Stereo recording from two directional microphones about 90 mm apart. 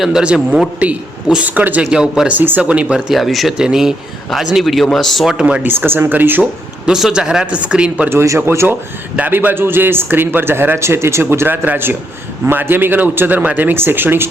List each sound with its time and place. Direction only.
0.0 s speech: 10° right (ahead or behind)
3.1 s speech: centre (ahead or behind); by 6.5 s 20° right (ahead or behind)
6.8 s speech: 5° right (ahead or behind)
8.1 s speech: 35° right (ahead or behind)
8.4 s a man's voice: 25° right (ahead or behind)